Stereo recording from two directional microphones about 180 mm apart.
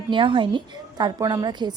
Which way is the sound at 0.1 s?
30° right (ahead or behind).